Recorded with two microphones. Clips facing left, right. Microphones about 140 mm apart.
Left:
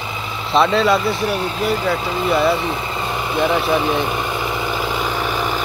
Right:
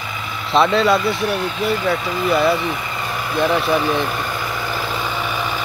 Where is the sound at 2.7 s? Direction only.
25° left (ahead or behind).